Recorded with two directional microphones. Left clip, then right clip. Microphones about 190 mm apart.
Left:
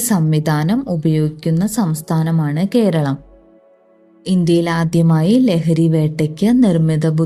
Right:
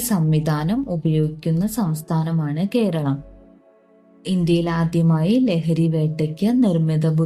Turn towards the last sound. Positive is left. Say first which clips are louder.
# left 5 dB
turn(degrees=40)  # may be behind; listen again after turning